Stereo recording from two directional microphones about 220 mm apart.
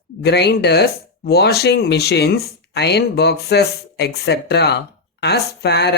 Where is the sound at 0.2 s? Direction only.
50° left (ahead or behind).